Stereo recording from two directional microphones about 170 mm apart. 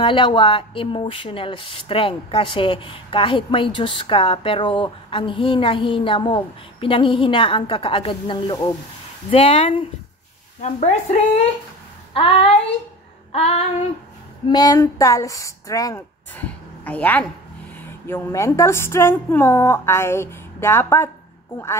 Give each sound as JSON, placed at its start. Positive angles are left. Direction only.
{"t": 0.0, "sound": "speech", "side_deg": 30}
{"t": 14.5, "sound": "a woman's voice", "side_deg": 25}